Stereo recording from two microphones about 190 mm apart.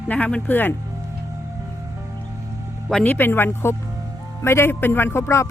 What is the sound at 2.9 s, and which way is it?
Speech, 5° left (ahead or behind).